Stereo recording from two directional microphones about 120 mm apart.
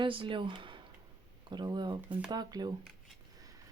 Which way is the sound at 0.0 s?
45° right (ahead or behind).